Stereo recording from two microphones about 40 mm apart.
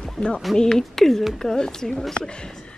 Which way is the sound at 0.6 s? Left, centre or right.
Centre.